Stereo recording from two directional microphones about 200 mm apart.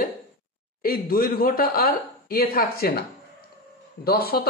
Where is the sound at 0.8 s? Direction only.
50° left (ahead or behind).